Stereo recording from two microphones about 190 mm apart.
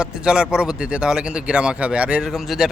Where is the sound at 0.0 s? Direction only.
5° right (ahead or behind).